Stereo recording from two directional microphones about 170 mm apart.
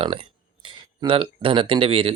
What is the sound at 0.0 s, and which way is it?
Speech, 30° right (ahead or behind).